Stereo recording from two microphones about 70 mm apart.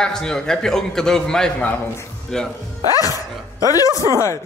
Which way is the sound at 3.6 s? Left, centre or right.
Left.